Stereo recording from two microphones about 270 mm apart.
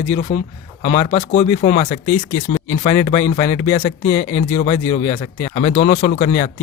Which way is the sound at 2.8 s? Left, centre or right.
Centre.